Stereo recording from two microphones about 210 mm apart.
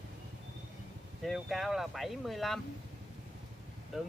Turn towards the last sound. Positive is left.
turn(degrees=0)  # may be behind; listen again after turning